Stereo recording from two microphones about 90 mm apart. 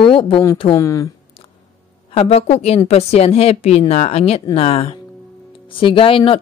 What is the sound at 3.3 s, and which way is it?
Speech, 90° left.